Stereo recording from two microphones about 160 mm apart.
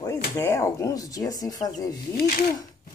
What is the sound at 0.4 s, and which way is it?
Speech, 15° left (ahead or behind).